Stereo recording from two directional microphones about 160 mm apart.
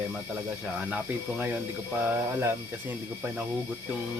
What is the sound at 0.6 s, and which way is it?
Speech, 5° right (ahead or behind).